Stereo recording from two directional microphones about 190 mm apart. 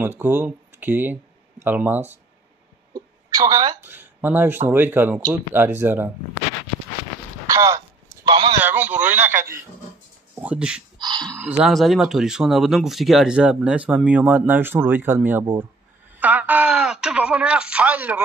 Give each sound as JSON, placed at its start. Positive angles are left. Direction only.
{"t": 0.0, "sound": "speech", "side_deg": -10}
{"t": 2.9, "sound": "a sound", "side_deg": -20}
{"t": 3.8, "sound": "speech", "side_deg": -10}
{"t": 7.4, "sound": "a sound", "side_deg": -15}
{"t": 8.5, "sound": "speech", "side_deg": -10}
{"t": 11.0, "sound": "speech", "side_deg": -20}
{"t": 11.3, "sound": "speech", "side_deg": -5}